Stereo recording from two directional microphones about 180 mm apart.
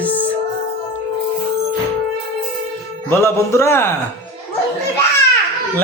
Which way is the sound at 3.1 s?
15° left (ahead or behind).